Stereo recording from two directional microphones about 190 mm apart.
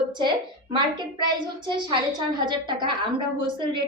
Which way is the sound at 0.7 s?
25° right (ahead or behind).